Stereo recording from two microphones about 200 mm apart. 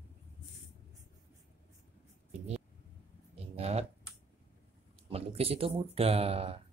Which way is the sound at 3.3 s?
30° right (ahead or behind).